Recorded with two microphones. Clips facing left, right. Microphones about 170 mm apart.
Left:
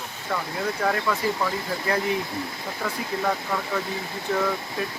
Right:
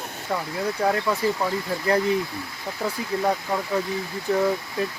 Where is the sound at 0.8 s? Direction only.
20° right (ahead or behind).